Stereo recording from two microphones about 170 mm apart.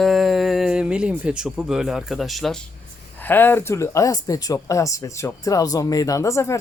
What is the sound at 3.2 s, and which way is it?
A man's voice, 10° left (ahead or behind).